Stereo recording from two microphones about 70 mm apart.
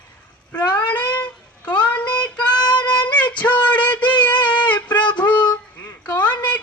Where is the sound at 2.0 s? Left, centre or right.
Left.